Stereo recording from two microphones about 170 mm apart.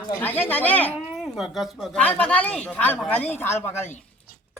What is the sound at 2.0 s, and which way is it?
Speech, 10° left (ahead or behind).